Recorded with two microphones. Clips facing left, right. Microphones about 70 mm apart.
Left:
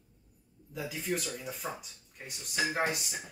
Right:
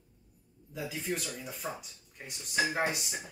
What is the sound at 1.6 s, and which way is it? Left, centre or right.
Speech, centre.